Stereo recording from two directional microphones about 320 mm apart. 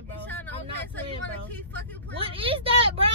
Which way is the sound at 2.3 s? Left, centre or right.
Centre.